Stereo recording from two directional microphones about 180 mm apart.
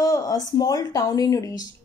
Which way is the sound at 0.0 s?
20° left (ahead or behind).